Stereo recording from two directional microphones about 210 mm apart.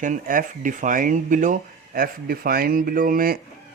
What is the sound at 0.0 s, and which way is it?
Speech, 40° right (ahead or behind).